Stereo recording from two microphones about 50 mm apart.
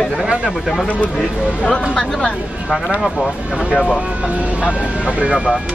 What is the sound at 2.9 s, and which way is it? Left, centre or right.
Speech, centre.